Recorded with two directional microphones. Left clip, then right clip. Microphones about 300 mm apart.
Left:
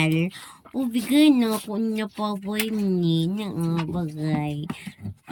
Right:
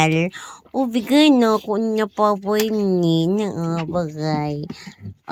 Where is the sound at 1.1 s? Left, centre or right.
Centre.